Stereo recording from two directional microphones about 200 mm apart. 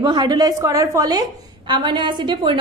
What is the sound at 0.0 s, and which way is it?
A woman's voice, 20° right (ahead or behind).